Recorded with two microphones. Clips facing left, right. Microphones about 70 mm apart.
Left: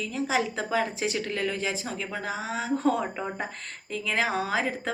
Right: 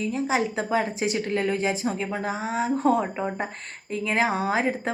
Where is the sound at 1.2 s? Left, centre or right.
Right.